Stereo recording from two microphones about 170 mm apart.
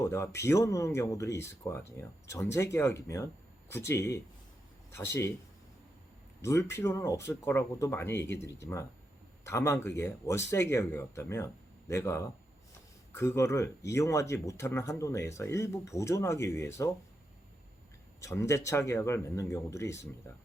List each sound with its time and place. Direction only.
0.0 s speech: 15° left (ahead or behind)
6.4 s speech: 15° left (ahead or behind)
18.2 s speech: 15° left (ahead or behind)